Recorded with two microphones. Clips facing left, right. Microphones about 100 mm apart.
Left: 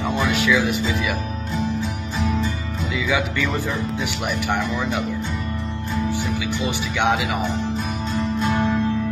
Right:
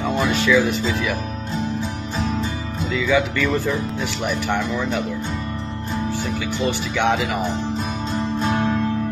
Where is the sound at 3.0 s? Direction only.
5° left (ahead or behind).